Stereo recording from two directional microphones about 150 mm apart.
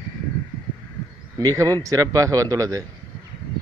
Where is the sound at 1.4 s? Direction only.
25° right (ahead or behind).